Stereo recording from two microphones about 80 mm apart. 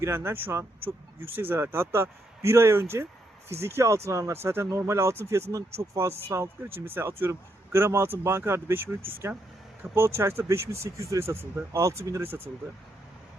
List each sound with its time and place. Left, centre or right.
0.0 s a man's voice: right